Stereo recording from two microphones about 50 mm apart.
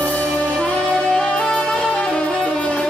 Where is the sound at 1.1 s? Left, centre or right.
Centre.